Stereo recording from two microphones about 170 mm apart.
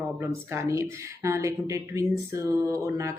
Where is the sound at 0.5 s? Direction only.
15° right (ahead or behind).